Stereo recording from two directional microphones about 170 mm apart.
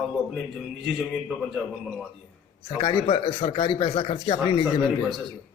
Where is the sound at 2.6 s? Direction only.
25° left (ahead or behind).